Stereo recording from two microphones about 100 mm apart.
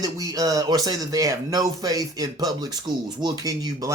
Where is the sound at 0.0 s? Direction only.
35° right (ahead or behind).